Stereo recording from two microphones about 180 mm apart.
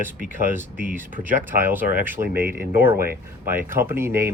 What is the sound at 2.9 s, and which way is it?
Speech, 55° right (ahead or behind).